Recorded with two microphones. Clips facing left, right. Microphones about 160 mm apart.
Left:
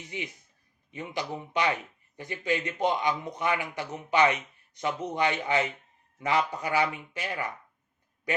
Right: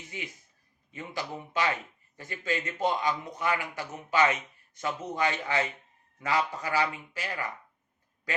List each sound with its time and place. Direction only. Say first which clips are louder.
0.1 s speech: left 4 dB; 20° left (ahead or behind)